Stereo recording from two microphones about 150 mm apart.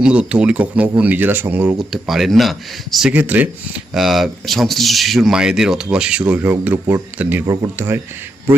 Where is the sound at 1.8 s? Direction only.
Centre (ahead or behind).